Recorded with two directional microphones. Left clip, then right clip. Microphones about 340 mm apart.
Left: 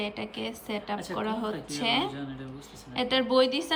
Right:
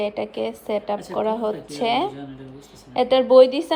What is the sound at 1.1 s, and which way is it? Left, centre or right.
Speech, centre.